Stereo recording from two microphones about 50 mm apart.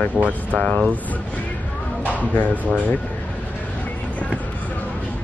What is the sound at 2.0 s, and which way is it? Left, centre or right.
Speech, left.